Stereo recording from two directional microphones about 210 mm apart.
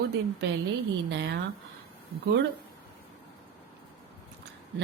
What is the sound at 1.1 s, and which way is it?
Speech, 55° right (ahead or behind).